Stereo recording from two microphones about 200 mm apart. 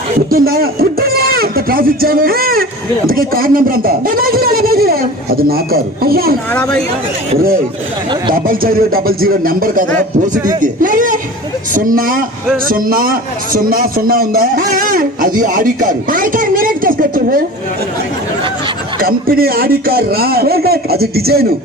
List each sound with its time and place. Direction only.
0.3 s a man's voice: 50° right (ahead or behind)
7.3 s a man's voice: 45° right (ahead or behind)
18.9 s a man's voice: 45° right (ahead or behind)